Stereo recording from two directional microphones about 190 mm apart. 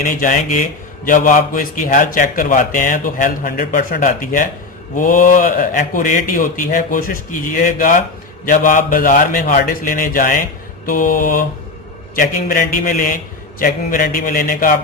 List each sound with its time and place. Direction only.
0.0 s a man's voice: 45° left (ahead or behind)